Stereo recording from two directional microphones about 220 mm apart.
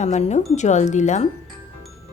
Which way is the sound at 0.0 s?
30° left (ahead or behind).